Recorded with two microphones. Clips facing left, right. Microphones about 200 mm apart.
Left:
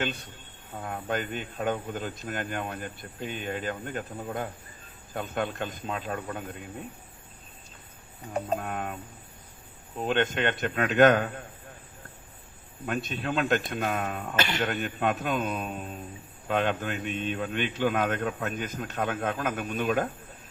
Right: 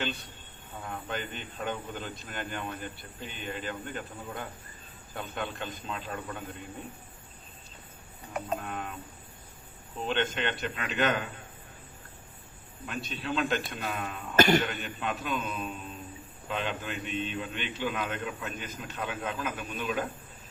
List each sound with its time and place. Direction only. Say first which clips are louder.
0.8 s speech: left 5 dB; 50° left (ahead or behind)
8.6 s speech: left 4 dB; 50° left (ahead or behind)
10.1 s speech: left 4 dB; 50° left (ahead or behind)
12.8 s speech: left 6 dB; 50° left (ahead or behind)
14.3 s speech: right 9 dB; 45° right (ahead or behind)
14.6 s speech: left 6 dB; 45° left (ahead or behind)